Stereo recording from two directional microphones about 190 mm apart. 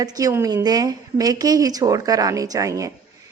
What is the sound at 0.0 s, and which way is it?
A woman's voice, 20° right (ahead or behind).